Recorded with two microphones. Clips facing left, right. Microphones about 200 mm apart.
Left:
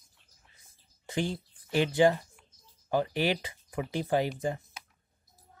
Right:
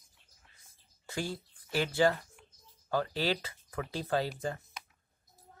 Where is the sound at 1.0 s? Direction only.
20° left (ahead or behind).